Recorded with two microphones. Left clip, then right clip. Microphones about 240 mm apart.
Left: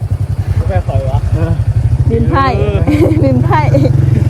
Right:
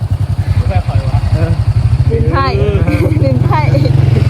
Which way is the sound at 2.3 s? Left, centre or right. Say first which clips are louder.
Left 2 dB; left.